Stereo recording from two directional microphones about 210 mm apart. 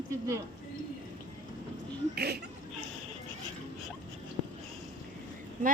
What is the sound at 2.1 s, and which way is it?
Speech, 50° right (ahead or behind).